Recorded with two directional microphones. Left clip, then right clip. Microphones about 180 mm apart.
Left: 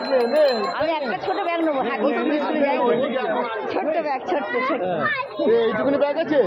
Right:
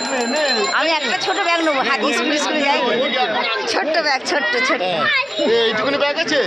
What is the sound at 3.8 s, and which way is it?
Speech, 5° right (ahead or behind).